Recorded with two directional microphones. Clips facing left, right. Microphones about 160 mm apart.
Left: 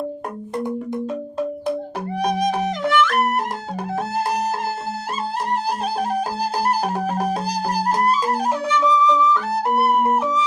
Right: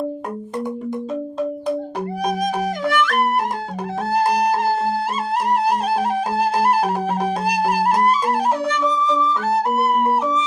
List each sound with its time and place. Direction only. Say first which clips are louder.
2.4 s music: even; 45° right (ahead or behind)
4.9 s music: right 4 dB; 60° right (ahead or behind)
8.6 s music: left 2 dB; 50° right (ahead or behind)
9.7 s music: even; centre (ahead or behind)